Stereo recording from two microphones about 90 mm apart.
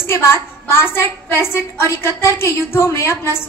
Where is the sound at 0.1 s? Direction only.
30° left (ahead or behind).